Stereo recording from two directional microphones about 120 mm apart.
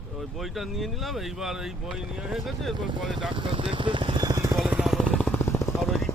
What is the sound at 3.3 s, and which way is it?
Vehicle, 45° right (ahead or behind).